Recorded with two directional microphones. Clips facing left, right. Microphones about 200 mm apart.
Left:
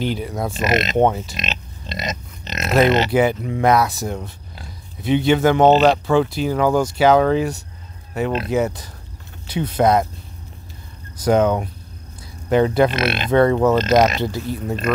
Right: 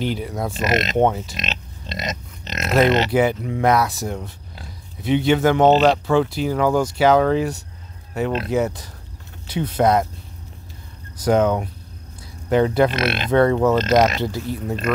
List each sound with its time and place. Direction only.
0.0 s speech: 25° left (ahead or behind)
0.5 s speech: 10° left (ahead or behind)
0.9 s speech: 25° left (ahead or behind)
1.3 s speech: 10° left (ahead or behind)
3.1 s speech: 20° left (ahead or behind)
5.7 s speech: 10° left (ahead or behind)
11.2 s speech: 20° left (ahead or behind)
12.9 s speech: 5° left (ahead or behind)
13.3 s speech: 15° left (ahead or behind)